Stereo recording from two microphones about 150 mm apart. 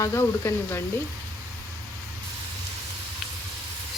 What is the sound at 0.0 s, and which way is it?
Speech, 15° left (ahead or behind).